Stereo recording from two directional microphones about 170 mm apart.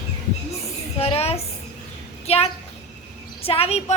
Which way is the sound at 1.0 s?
35° left (ahead or behind).